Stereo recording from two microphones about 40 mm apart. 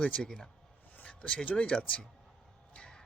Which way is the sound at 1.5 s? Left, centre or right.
Left.